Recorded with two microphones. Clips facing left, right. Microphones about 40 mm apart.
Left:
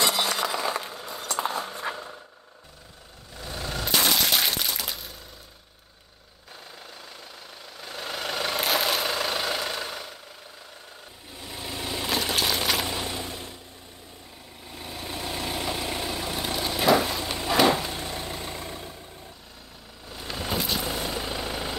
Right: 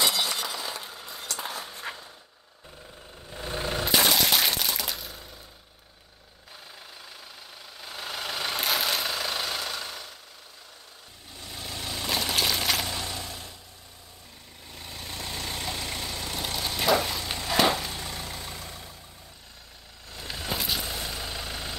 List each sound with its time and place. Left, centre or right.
0.5 s chink: left
1.1 s a sound: left
3.3 s vehicle: right
3.8 s a sound: centre
7.8 s vehicle: centre
9.6 s engine: centre
11.3 s vehicle: centre
12.2 s a sound: centre
12.8 s a sound: left
14.7 s vehicle: centre; by 18.9 s left
20.1 s vehicle: centre
20.9 s vehicle: centre